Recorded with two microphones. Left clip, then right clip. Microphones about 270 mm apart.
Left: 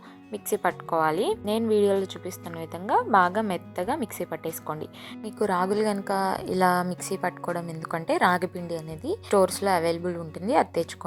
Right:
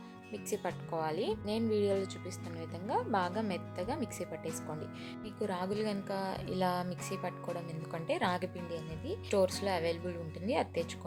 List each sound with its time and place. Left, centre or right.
0.9 s a woman's voice: centre